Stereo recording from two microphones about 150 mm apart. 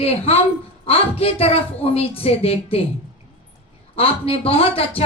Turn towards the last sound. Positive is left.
turn(degrees=40)  # may be behind; listen again after turning